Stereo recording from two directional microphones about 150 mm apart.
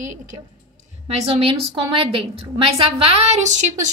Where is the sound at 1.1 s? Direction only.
40° right (ahead or behind).